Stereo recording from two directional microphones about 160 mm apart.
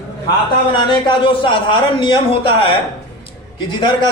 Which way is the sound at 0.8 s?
30° left (ahead or behind).